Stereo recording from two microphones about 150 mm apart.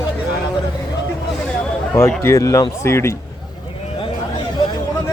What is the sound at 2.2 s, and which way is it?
Speech, 20° left (ahead or behind).